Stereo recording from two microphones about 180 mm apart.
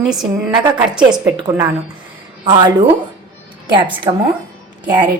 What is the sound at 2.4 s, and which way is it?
Speech, 25° right (ahead or behind).